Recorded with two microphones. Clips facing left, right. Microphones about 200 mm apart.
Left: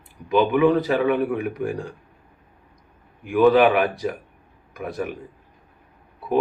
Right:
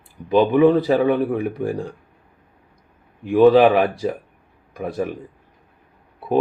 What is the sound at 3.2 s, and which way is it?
A man's voice, 30° right (ahead or behind).